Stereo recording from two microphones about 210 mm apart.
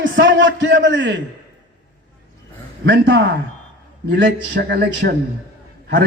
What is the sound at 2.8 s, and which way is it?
Speech, 60° right (ahead or behind).